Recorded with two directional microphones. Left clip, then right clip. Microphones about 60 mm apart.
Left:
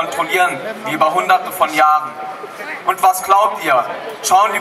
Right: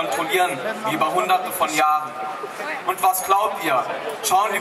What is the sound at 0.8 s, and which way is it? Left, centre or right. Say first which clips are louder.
Speech: left 6 dB; left.